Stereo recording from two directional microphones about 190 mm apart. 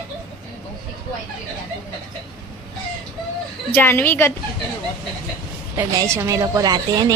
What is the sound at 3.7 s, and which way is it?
Speech, 10° left (ahead or behind).